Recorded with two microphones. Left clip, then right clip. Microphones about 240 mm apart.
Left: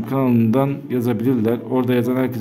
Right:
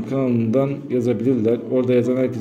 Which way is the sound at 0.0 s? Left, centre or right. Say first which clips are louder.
Left 2 dB; left.